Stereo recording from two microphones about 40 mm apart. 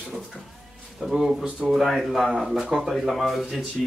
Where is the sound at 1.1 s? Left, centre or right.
Centre.